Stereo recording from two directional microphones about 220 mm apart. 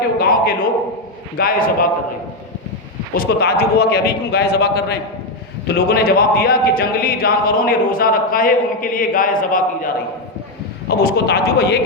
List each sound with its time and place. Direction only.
0.2 s a man's voice: 40° left (ahead or behind)
3.2 s a man's voice: 45° left (ahead or behind)